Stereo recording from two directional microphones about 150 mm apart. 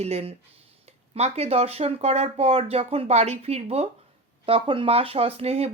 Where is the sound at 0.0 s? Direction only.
45° right (ahead or behind).